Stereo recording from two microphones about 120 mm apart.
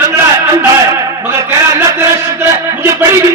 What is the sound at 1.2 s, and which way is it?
Speech, 20° right (ahead or behind).